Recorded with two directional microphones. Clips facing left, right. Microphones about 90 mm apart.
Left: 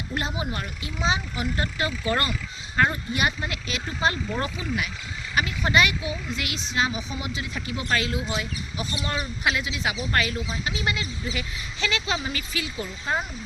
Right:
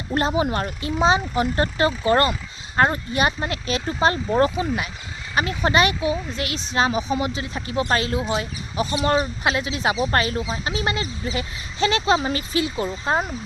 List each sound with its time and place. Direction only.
0.1 s speech: 40° right (ahead or behind)